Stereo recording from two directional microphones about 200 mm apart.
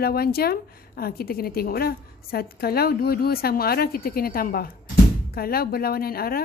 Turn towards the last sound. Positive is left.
turn(degrees=50)  # may be behind; listen again after turning